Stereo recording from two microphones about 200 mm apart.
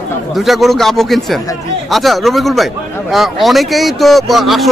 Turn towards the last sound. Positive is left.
turn(degrees=0)  # may be behind; listen again after turning